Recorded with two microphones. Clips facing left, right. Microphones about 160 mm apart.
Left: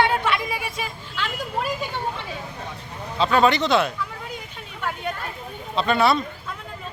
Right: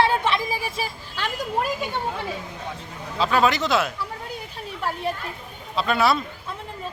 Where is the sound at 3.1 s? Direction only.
5° right (ahead or behind).